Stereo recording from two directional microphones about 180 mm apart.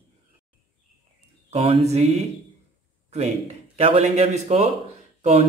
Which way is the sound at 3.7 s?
35° right (ahead or behind).